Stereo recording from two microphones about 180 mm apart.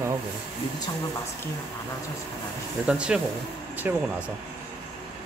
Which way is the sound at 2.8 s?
5° right (ahead or behind).